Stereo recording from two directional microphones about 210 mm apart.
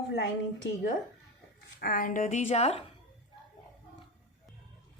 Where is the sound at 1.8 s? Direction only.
40° left (ahead or behind).